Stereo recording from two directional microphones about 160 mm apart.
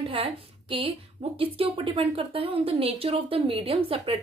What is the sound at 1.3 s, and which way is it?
A woman's voice, 35° right (ahead or behind).